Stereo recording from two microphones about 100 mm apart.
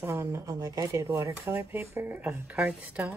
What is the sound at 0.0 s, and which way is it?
Speech, 30° right (ahead or behind).